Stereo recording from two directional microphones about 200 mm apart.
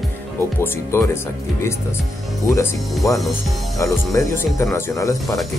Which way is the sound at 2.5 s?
15° left (ahead or behind).